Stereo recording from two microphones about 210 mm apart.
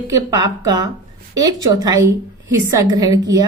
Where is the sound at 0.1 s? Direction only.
15° right (ahead or behind).